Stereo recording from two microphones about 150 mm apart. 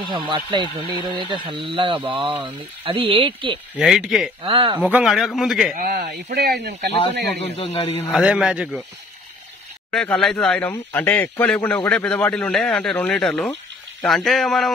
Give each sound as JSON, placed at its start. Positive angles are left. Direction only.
{"t": 0.1, "sound": "speech", "side_deg": -30}
{"t": 3.7, "sound": "a man's voice", "side_deg": -5}
{"t": 4.4, "sound": "speech", "side_deg": -40}
{"t": 4.9, "sound": "a man's voice", "side_deg": 0}
{"t": 6.3, "sound": "speech", "side_deg": -90}
{"t": 6.9, "sound": "a man's voice", "side_deg": 40}
{"t": 8.1, "sound": "a man's voice", "side_deg": -5}
{"t": 9.8, "sound": "a man's voice", "side_deg": 5}